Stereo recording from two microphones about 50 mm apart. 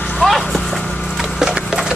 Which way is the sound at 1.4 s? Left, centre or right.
Centre.